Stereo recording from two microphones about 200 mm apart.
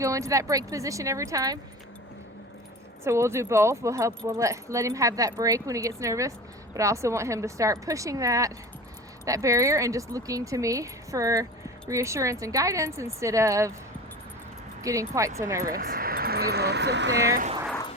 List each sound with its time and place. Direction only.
0.0 s speech: 15° right (ahead or behind)
3.0 s speech: 15° right (ahead or behind)
14.8 s speech: 15° right (ahead or behind)
15.6 s speech: 45° right (ahead or behind)